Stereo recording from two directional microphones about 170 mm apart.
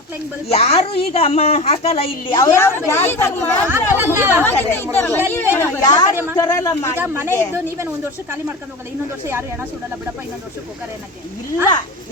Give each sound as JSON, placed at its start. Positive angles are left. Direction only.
{"t": 0.4, "sound": "a woman's voice", "side_deg": 35}
{"t": 2.5, "sound": "a woman's voice", "side_deg": 15}
{"t": 3.7, "sound": "speech", "side_deg": -15}
{"t": 4.4, "sound": "a woman's voice", "side_deg": 10}
{"t": 7.0, "sound": "speech", "side_deg": -15}